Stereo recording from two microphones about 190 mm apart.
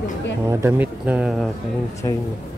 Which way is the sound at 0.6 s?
10° right (ahead or behind).